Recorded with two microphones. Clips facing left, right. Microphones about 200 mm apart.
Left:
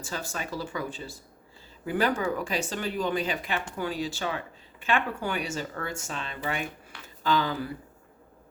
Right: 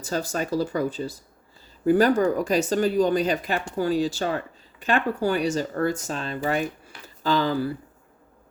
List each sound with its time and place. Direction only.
0.0 s speech: 40° right (ahead or behind)